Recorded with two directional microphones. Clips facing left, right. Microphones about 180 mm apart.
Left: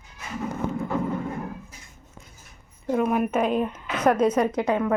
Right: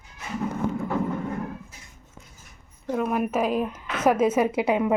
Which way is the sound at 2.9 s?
Centre (ahead or behind).